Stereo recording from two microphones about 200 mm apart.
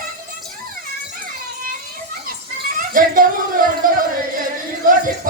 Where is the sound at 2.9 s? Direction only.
45° right (ahead or behind).